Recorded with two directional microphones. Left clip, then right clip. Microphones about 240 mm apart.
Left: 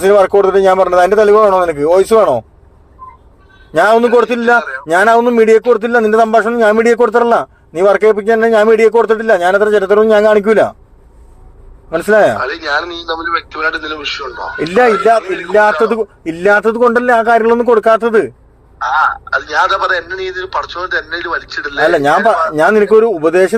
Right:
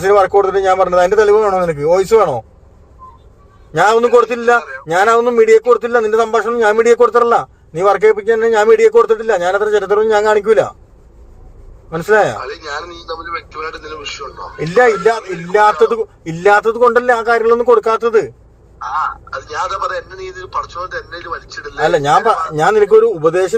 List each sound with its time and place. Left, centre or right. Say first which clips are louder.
0.0 s a man's voice: left 2 dB; left
3.8 s a man's voice: left 1 dB; left
11.9 s a man's voice: left 3 dB; left